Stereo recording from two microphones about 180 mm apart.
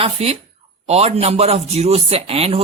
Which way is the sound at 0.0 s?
35° right (ahead or behind).